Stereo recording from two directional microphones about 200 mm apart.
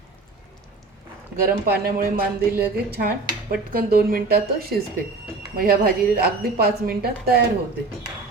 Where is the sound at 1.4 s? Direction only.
50° right (ahead or behind).